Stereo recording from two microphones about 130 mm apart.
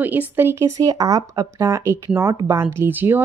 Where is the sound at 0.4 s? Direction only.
15° right (ahead or behind).